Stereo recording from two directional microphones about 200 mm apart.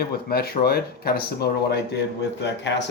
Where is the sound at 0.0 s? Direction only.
50° left (ahead or behind).